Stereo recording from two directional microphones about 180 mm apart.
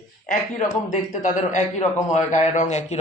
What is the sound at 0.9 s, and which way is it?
A man's voice, 45° left (ahead or behind).